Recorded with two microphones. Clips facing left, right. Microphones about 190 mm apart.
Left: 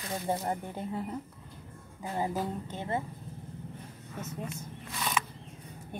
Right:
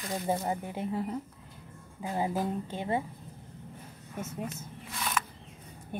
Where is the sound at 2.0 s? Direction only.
15° right (ahead or behind).